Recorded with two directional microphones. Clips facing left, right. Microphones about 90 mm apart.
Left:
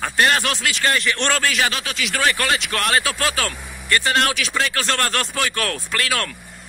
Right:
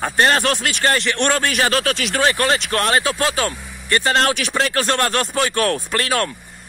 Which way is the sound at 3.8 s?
30° right (ahead or behind).